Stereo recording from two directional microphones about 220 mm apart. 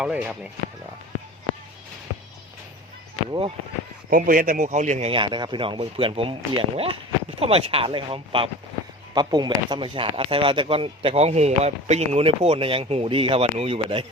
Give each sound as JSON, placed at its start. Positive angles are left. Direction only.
{"t": 0.0, "sound": "speech", "side_deg": -5}
{"t": 4.1, "sound": "speech", "side_deg": -40}